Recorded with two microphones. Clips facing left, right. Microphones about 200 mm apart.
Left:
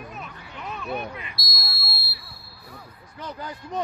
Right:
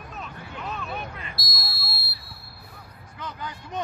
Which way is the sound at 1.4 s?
Centre (ahead or behind).